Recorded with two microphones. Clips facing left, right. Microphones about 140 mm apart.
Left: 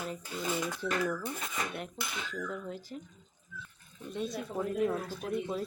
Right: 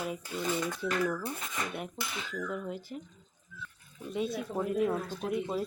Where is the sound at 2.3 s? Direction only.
5° right (ahead or behind).